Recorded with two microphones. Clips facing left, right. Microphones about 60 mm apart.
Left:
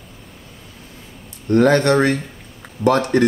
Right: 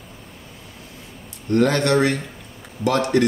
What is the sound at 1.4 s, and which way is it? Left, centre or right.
Speech, left.